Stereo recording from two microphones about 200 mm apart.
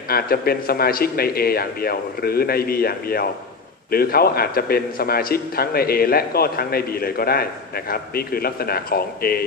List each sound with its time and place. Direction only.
0.1 s a man's voice: 50° left (ahead or behind)